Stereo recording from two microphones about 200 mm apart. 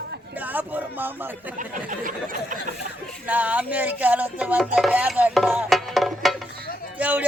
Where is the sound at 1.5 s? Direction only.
40° right (ahead or behind).